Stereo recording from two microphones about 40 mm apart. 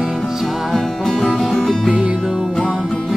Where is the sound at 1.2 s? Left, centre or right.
Centre.